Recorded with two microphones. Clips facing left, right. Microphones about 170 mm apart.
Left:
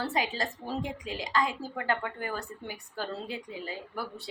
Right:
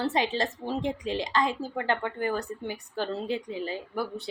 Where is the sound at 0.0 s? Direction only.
25° right (ahead or behind).